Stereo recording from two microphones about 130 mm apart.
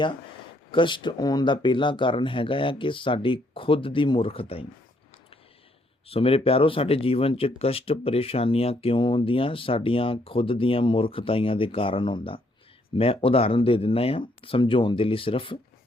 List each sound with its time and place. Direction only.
0.7 s speech: 40° left (ahead or behind)
6.1 s speech: 45° left (ahead or behind)